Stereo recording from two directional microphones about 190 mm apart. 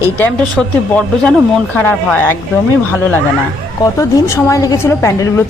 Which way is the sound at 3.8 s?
15° left (ahead or behind).